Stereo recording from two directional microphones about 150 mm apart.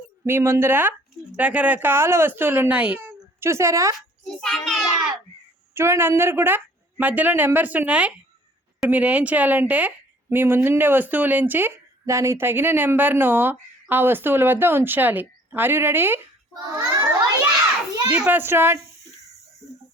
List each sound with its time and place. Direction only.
0.3 s a woman's voice: 15° right (ahead or behind)
4.2 s a child's voice: 5° left (ahead or behind)
5.7 s a woman's voice: 15° right (ahead or behind)
16.7 s children playing: 30° right (ahead or behind)
18.1 s a woman's voice: 10° right (ahead or behind)